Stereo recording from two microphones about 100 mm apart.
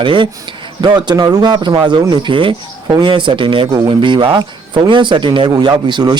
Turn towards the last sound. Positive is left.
turn(degrees=-50)  # may be behind; listen again after turning